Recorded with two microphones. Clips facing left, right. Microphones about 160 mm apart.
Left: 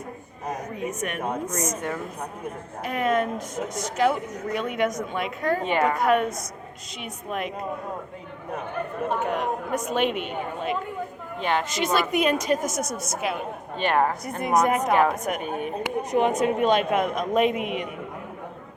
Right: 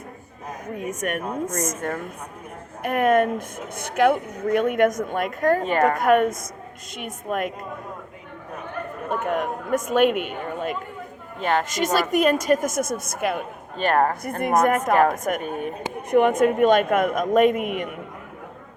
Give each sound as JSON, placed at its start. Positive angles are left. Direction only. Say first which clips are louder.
{"t": 0.9, "sound": "a woman's voice", "louder": "right 2 dB", "side_deg": -45}
{"t": 9.2, "sound": "a woman's voice", "louder": "right 1 dB", "side_deg": -50}
{"t": 16.1, "sound": "a woman's voice", "louder": "right 5 dB", "side_deg": -55}